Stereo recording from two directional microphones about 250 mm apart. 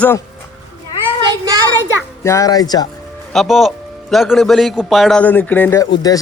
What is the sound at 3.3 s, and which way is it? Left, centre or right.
A man's voice, centre.